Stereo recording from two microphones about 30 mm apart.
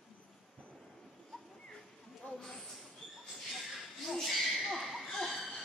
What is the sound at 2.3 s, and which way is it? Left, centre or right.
Speech, centre.